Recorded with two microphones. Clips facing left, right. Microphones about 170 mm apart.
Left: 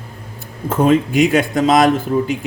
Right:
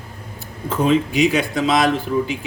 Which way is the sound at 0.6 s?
50° left (ahead or behind).